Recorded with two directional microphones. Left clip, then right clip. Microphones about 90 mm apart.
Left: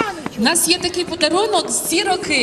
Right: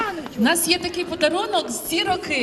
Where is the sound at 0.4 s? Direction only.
45° left (ahead or behind).